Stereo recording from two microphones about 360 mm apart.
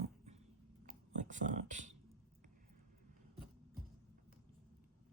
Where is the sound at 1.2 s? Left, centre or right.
Right.